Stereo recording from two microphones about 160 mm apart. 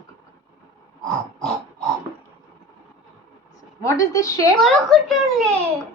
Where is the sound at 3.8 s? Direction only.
20° left (ahead or behind).